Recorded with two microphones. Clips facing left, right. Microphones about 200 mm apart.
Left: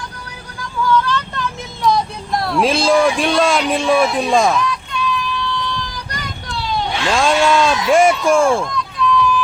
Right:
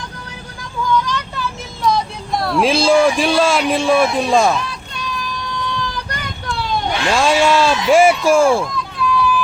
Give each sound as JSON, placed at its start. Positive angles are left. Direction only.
{"t": 0.9, "sound": "vehicle", "side_deg": -15}
{"t": 1.8, "sound": "speech", "side_deg": 0}
{"t": 4.6, "sound": "synthetic singing", "side_deg": -35}
{"t": 6.1, "sound": "vehicle", "side_deg": -55}
{"t": 7.1, "sound": "speech", "side_deg": -5}